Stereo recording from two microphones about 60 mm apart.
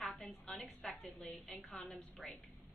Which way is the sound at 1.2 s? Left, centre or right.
Centre.